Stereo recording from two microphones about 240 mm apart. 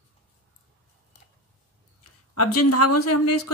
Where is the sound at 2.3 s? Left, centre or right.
Left.